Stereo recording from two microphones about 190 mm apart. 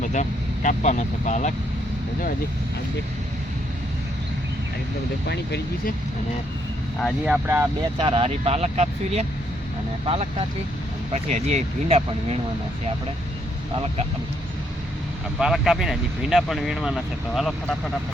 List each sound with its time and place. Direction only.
0.0 s speech: 40° left (ahead or behind)
5.3 s speech: 60° left (ahead or behind)
7.3 s speech: 10° right (ahead or behind)
7.9 s speech: 30° right (ahead or behind)
15.4 s speech: centre (ahead or behind)